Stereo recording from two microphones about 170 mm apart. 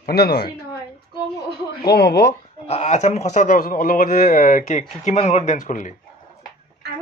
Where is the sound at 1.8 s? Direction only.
70° left (ahead or behind).